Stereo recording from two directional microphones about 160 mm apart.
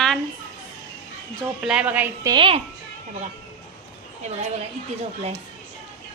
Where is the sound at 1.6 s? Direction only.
10° right (ahead or behind).